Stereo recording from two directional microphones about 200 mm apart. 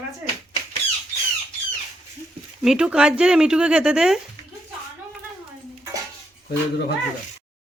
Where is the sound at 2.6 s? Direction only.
5° right (ahead or behind).